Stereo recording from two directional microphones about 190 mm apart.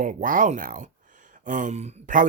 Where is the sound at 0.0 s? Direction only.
45° right (ahead or behind).